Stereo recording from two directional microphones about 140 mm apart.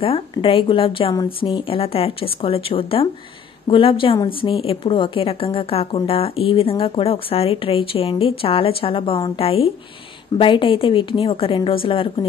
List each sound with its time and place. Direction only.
0.0 s speech: 40° left (ahead or behind)